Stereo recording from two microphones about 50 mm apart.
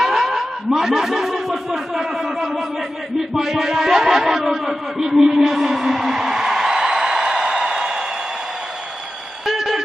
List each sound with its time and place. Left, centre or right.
0.0 s chuckle: centre
3.2 s speech: centre
9.5 s a sound: centre